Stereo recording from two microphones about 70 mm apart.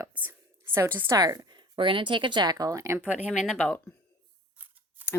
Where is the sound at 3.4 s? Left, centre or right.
Centre.